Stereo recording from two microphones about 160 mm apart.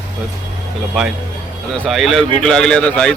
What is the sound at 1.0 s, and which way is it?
Speech, centre (ahead or behind).